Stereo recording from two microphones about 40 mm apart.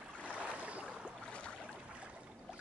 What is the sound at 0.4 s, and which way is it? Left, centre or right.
Boat, right.